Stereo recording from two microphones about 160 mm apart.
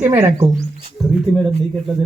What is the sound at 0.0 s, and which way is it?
Speech, 15° right (ahead or behind).